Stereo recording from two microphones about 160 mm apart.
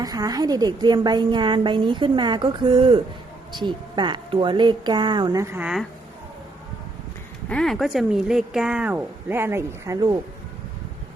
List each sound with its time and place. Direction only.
0.0 s a woman's voice: 25° right (ahead or behind)
7.4 s speech: 5° left (ahead or behind); by 10.2 s 20° right (ahead or behind)